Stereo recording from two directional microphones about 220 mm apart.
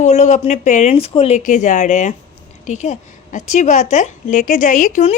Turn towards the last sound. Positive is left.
turn(degrees=35)  # may be behind; listen again after turning